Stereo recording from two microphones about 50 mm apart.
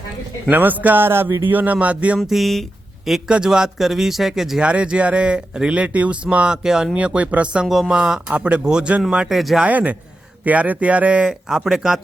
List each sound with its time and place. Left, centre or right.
0.5 s speech: right
1.0 s a sound: right
1.5 s speech: right
2.1 s speech: centre
3.2 s speech: centre
4.6 s speech: right
6.6 s speech: centre
6.9 s speech: right
7.7 s speech: centre
9.3 s speech: centre
9.6 s speech: right
11.2 s speech: centre